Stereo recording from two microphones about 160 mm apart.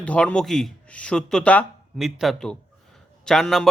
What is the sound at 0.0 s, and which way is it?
Speech, 10° left (ahead or behind).